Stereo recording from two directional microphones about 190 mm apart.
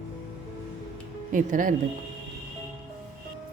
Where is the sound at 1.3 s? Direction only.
45° right (ahead or behind).